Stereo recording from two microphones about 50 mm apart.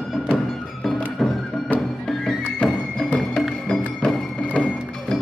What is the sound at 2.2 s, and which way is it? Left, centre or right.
Music, centre.